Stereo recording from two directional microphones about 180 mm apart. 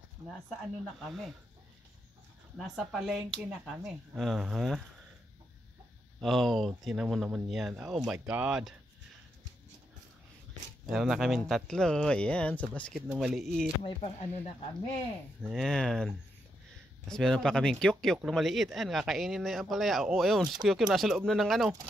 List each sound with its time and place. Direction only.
0.2 s speech: 20° right (ahead or behind)
0.9 s speech: centre (ahead or behind)
2.5 s speech: centre (ahead or behind)
6.2 s speech: centre (ahead or behind)
10.9 s speech: centre (ahead or behind)
13.8 s speech: 35° left (ahead or behind)
15.5 s speech: 5° left (ahead or behind)
17.1 s speech: 5° left (ahead or behind)